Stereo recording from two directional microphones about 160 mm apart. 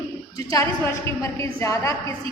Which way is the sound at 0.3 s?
20° left (ahead or behind).